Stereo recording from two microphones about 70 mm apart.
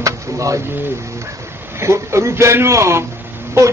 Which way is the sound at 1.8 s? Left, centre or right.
Right.